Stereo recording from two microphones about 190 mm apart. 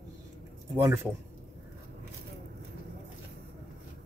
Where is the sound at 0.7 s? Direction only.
15° right (ahead or behind).